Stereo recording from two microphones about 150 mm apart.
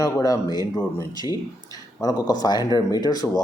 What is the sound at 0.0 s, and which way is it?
Speech, 25° left (ahead or behind).